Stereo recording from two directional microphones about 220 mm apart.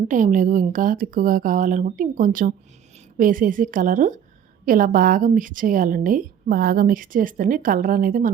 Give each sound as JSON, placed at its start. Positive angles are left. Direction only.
{"t": 0.1, "sound": "a woman's voice", "side_deg": -35}